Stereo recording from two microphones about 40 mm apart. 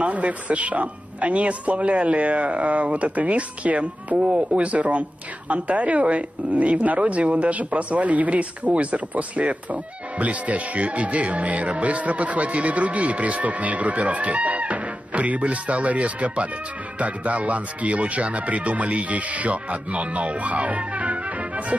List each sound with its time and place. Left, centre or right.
0.0 s speech: right